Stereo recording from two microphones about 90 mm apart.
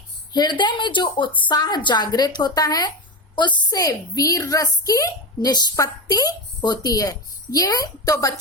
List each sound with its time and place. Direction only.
0.3 s a woman's voice: 55° left (ahead or behind)
3.3 s speech: 60° left (ahead or behind)
3.8 s a woman's voice: 40° left (ahead or behind)